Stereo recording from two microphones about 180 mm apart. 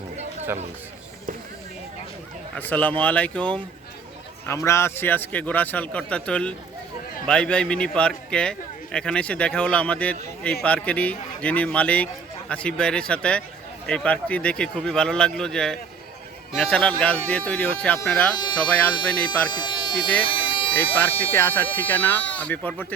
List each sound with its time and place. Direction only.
2.6 s a man's voice: 10° left (ahead or behind)
19.5 s speech: 25° left (ahead or behind)
20.2 s a sound: 30° left (ahead or behind)
20.9 s a man's voice: 10° left (ahead or behind)